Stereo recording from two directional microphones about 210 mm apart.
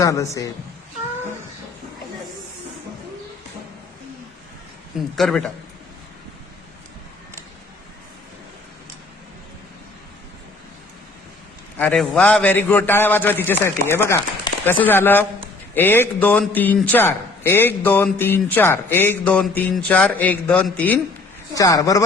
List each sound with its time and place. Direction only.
0.0 s a man's voice: 15° left (ahead or behind)
5.1 s a man's voice: centre (ahead or behind)
11.8 s a man's voice: 5° left (ahead or behind)